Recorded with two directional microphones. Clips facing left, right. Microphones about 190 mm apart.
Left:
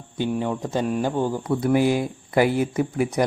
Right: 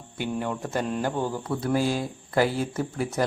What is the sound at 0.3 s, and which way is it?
Speech, 15° left (ahead or behind).